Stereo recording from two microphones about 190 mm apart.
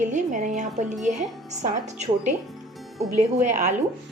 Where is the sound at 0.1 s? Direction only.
40° right (ahead or behind).